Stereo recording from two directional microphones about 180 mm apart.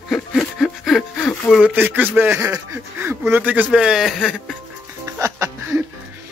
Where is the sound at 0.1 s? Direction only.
5° left (ahead or behind).